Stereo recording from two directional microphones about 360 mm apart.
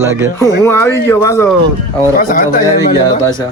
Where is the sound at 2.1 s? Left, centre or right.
Left.